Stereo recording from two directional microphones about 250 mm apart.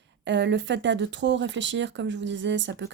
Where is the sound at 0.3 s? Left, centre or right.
Right.